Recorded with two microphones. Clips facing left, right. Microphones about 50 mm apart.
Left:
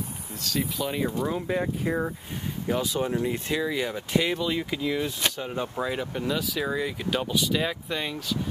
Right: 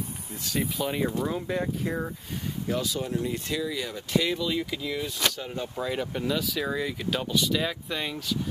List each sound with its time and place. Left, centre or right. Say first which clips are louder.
0.4 s speech: even; centre; by 5.9 s left
5.9 s speech: even; centre